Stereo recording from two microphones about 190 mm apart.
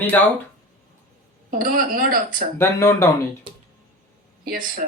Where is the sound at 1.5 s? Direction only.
45° right (ahead or behind).